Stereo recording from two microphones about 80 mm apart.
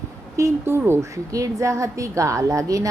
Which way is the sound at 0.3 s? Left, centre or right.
Right.